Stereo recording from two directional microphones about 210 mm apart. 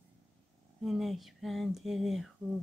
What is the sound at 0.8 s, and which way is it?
Speech, centre (ahead or behind).